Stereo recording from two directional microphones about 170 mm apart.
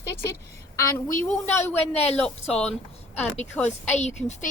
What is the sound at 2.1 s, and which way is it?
A woman's voice, 5° left (ahead or behind).